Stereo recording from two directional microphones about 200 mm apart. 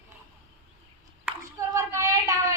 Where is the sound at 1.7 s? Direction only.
15° right (ahead or behind).